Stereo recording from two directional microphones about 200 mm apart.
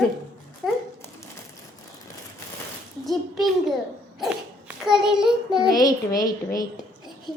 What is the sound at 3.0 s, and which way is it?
Speech, centre (ahead or behind).